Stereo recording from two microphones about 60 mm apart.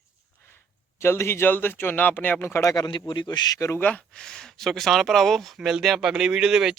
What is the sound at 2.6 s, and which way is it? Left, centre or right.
Speech, left.